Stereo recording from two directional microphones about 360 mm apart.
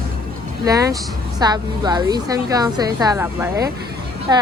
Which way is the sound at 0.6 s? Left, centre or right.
Centre.